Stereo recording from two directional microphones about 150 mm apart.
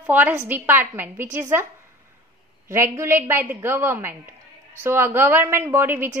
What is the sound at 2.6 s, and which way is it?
A woman's voice, 15° right (ahead or behind).